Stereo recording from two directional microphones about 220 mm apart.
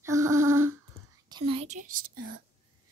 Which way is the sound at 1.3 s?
20° right (ahead or behind).